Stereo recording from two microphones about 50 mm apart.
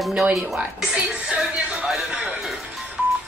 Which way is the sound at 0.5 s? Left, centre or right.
Centre.